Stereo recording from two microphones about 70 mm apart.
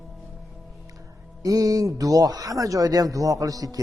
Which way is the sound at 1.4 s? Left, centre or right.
Right.